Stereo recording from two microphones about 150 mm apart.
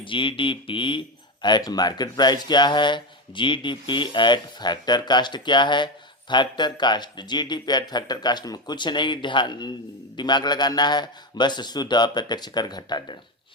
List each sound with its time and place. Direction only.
0.0 s speech: 35° left (ahead or behind)